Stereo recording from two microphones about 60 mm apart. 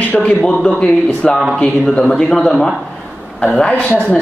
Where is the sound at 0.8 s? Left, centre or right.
Centre.